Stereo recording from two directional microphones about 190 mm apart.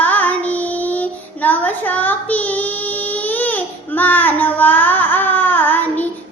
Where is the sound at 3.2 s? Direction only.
10° left (ahead or behind).